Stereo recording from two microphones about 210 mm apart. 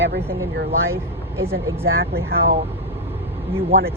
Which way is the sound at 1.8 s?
45° right (ahead or behind).